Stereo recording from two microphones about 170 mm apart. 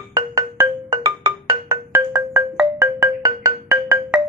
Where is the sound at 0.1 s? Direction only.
20° right (ahead or behind).